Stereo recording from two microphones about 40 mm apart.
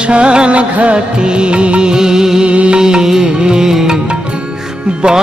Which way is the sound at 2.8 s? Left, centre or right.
Centre.